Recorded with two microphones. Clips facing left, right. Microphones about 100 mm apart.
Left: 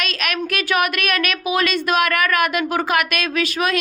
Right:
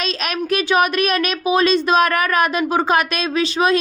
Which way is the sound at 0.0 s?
30° right (ahead or behind).